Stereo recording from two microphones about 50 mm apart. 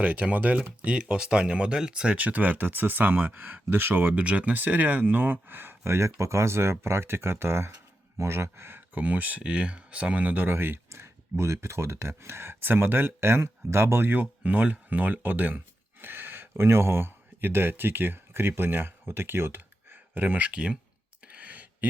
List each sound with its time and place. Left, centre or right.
0.0 s speech: right
2.1 s speech: right
4.1 s speech: right
4.5 s speech: right
9.0 s speech: right
11.0 s speech: right
14.4 s speech: right
16.6 s speech: right
21.2 s a sound: right